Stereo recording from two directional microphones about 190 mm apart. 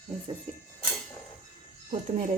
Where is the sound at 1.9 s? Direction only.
40° right (ahead or behind).